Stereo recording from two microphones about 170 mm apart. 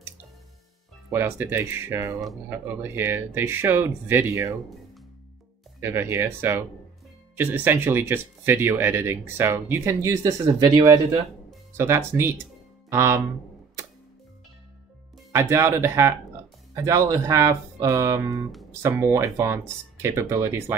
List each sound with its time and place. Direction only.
1.1 s speech: 15° right (ahead or behind)
5.8 s speech: 15° right (ahead or behind)
15.3 s speech: 15° right (ahead or behind)